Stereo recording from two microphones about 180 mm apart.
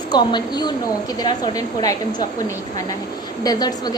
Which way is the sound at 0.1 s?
25° left (ahead or behind).